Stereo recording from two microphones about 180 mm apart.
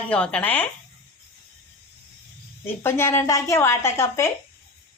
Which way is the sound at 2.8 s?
15° left (ahead or behind).